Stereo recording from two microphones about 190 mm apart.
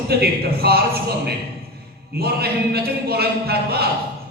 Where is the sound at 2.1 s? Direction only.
55° right (ahead or behind).